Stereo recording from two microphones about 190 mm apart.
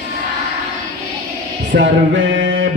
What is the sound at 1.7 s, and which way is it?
Music, 75° right (ahead or behind).